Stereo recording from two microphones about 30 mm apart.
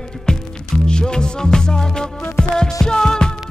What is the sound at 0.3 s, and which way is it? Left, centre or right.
Music, left.